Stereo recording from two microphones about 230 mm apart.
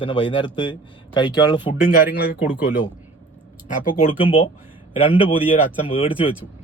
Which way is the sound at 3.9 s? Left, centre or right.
Left.